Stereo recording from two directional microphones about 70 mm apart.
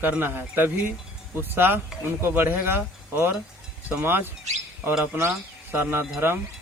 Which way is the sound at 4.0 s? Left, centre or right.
Right.